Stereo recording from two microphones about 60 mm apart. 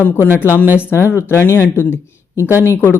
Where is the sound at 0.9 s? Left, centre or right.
Left.